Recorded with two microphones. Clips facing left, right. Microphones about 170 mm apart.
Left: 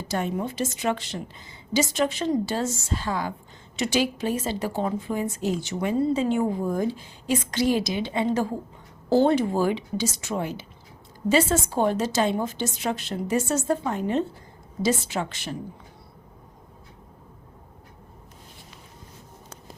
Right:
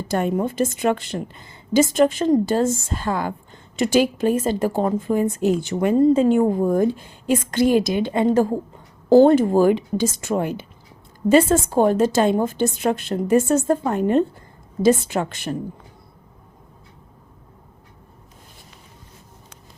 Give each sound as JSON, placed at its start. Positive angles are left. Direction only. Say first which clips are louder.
{"t": 0.1, "sound": "a woman's voice", "louder": "right 6 dB", "side_deg": -55}